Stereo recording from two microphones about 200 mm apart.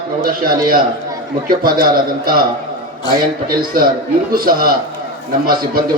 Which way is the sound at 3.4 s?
45° right (ahead or behind).